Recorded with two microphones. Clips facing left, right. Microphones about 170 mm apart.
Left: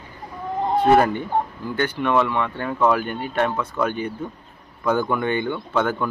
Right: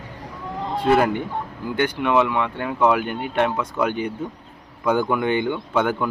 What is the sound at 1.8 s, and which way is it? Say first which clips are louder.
Speech: right 1 dB; 10° right (ahead or behind).